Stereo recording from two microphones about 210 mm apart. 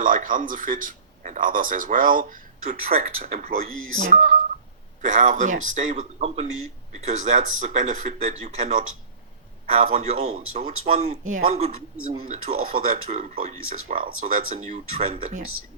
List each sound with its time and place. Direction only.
0.0 s speech: 40° right (ahead or behind)
9.9 s speech: 30° right (ahead or behind)
12.0 s speech: 40° right (ahead or behind)